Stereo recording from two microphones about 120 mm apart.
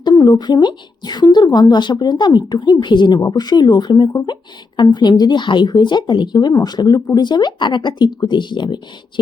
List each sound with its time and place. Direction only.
0.0 s speech: 35° left (ahead or behind)